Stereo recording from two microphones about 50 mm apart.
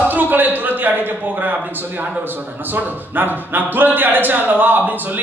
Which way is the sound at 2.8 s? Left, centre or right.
Right.